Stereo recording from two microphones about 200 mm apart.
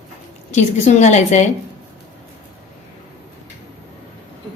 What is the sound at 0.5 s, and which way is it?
Speech, 35° left (ahead or behind).